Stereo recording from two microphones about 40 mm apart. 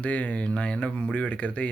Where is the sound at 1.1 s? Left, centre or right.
Left.